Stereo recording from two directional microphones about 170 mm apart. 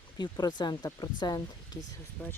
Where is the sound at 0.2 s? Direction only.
25° left (ahead or behind).